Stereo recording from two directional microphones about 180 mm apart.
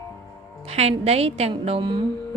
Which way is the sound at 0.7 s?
35° right (ahead or behind).